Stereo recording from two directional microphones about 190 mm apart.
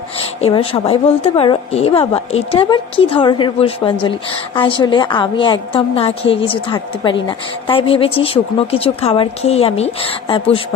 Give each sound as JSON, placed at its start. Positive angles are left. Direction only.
{"t": 0.4, "sound": "a woman's voice", "side_deg": 30}